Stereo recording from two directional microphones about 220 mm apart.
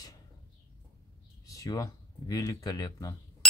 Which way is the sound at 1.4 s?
15° left (ahead or behind).